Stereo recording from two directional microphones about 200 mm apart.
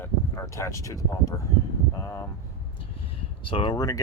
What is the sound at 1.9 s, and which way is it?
Vehicle, 20° left (ahead or behind).